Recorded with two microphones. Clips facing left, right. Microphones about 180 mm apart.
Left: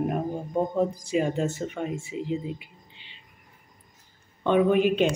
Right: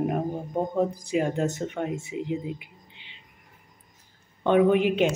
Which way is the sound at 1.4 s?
15° right (ahead or behind).